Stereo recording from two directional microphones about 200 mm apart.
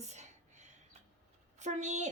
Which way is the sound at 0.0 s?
35° right (ahead or behind).